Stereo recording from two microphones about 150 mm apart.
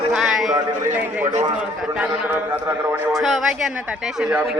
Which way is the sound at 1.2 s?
55° right (ahead or behind).